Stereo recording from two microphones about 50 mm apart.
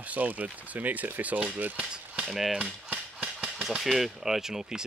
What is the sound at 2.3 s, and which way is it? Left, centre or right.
Speech, centre.